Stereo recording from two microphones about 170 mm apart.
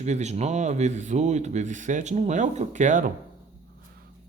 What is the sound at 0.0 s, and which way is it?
Speech, 40° right (ahead or behind).